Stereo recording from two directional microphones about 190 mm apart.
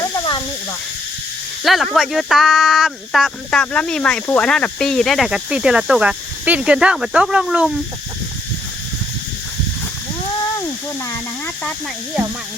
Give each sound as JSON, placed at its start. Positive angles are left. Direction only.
{"t": 0.0, "sound": "snake", "side_deg": 25}
{"t": 1.6, "sound": "speech", "side_deg": 0}
{"t": 11.0, "sound": "speech", "side_deg": 15}